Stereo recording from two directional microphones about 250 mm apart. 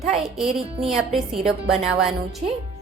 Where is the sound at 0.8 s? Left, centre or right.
Centre.